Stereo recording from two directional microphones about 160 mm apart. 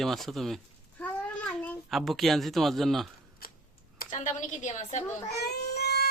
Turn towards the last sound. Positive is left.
turn(degrees=90)